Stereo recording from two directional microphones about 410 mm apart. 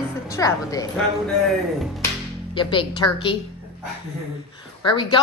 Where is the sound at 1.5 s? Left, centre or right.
Centre.